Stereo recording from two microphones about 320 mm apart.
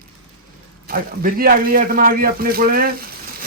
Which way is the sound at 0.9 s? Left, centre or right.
Right.